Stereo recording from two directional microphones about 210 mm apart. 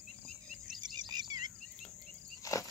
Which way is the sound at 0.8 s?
20° right (ahead or behind).